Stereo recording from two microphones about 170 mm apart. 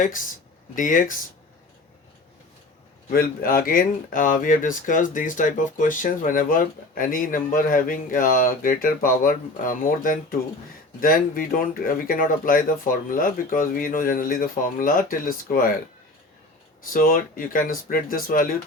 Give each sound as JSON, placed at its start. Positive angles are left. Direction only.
{"t": 0.8, "sound": "speech", "side_deg": 55}
{"t": 3.1, "sound": "speech", "side_deg": 60}
{"t": 16.8, "sound": "speech", "side_deg": 55}